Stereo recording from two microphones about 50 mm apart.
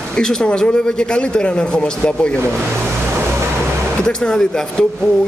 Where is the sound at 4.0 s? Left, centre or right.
Centre.